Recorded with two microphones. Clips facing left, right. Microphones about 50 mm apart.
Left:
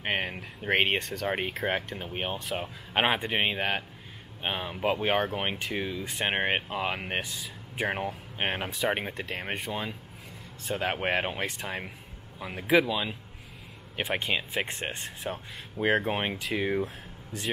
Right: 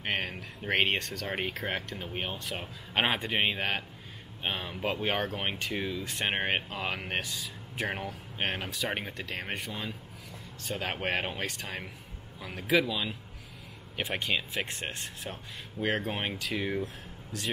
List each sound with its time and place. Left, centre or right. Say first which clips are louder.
0.0 s speech: left 2 dB; centre
9.7 s speech: left 4 dB; centre
10.6 s speech: left 4 dB; centre
14.1 s speech: left 2 dB; centre
16.0 s speech: left 4 dB; centre